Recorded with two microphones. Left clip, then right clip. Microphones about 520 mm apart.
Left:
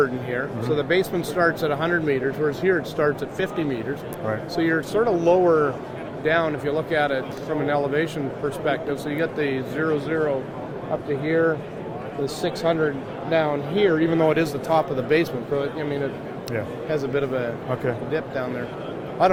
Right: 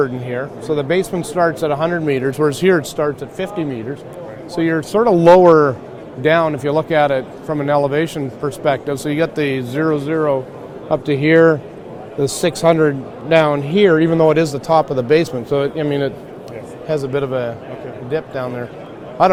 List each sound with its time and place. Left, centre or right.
0.0 s speech: right
3.0 s speech: right
4.5 s speech: right